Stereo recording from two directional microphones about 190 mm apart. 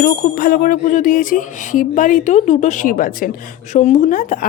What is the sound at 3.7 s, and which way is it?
Speech, 40° left (ahead or behind).